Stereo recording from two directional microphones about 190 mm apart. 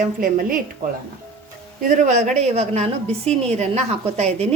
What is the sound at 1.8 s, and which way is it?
Speech, 40° right (ahead or behind).